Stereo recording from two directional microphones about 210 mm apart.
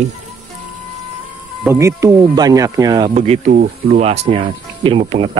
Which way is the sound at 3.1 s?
30° right (ahead or behind).